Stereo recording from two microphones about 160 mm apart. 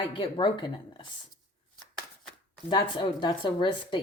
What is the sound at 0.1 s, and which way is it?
Speech, 30° left (ahead or behind).